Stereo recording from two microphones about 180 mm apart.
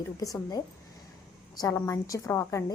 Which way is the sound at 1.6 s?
20° left (ahead or behind).